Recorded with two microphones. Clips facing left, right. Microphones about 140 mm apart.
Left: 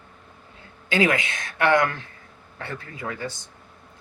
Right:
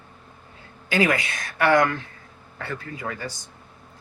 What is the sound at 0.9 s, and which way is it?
Speech, 25° left (ahead or behind).